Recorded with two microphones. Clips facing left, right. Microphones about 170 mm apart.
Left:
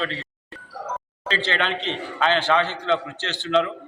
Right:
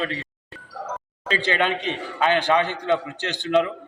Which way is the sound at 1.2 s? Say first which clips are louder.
Right 2 dB; 10° right (ahead or behind).